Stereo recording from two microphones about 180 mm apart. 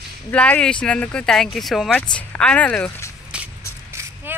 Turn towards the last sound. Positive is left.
turn(degrees=-15)  # may be behind; listen again after turning